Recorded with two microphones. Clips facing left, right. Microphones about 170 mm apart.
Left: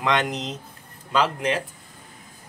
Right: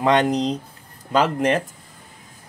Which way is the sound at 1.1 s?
45° right (ahead or behind).